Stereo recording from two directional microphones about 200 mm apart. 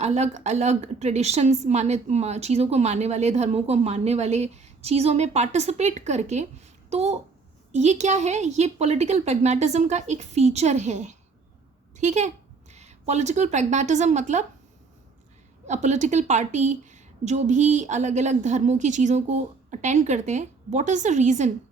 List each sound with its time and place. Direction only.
0.0 s a woman's voice: 35° right (ahead or behind)
15.6 s a woman's voice: 35° right (ahead or behind)